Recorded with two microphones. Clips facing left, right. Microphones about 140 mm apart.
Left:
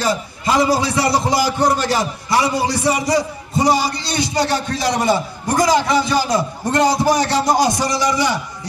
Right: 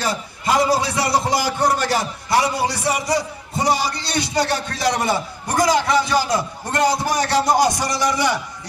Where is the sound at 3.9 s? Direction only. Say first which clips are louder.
Left 2 dB; 60° right (ahead or behind).